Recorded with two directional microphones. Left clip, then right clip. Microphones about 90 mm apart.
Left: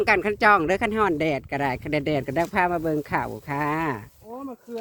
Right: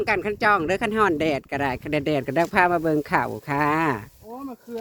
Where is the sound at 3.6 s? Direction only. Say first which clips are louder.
Right 4 dB; 60° right (ahead or behind).